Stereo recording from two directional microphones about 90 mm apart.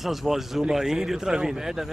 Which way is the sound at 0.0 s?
Centre (ahead or behind).